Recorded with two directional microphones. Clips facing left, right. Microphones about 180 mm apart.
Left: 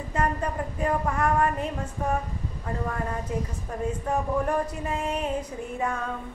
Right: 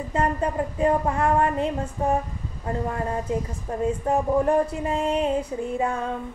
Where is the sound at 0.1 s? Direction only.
30° right (ahead or behind).